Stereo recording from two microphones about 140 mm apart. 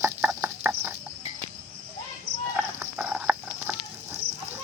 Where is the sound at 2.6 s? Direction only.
15° right (ahead or behind).